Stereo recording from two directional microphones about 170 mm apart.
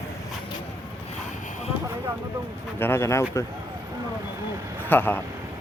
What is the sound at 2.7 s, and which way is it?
Speech, 15° left (ahead or behind).